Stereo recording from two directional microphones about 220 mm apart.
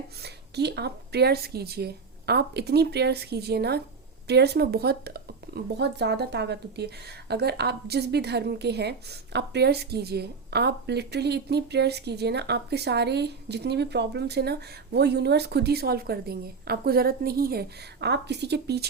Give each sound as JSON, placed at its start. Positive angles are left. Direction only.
{"t": 0.2, "sound": "speech", "side_deg": -50}